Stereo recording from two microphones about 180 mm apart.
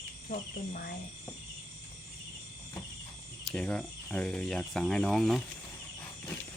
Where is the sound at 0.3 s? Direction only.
55° left (ahead or behind).